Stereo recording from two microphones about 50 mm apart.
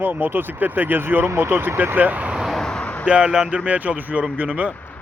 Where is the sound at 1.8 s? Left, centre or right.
Right.